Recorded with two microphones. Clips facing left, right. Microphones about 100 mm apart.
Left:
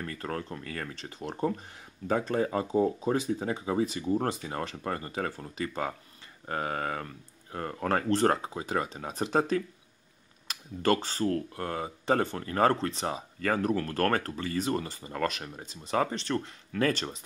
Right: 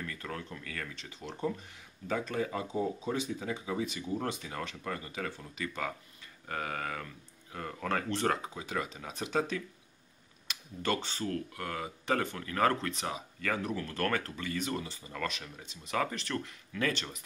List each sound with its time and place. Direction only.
0.0 s speech: 40° left (ahead or behind)
14.8 s speech: 50° left (ahead or behind); by 16.5 s 30° left (ahead or behind)
16.7 s speech: 40° left (ahead or behind)